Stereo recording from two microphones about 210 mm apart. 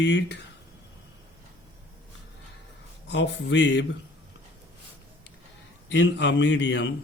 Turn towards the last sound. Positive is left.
turn(degrees=60)  # may be behind; listen again after turning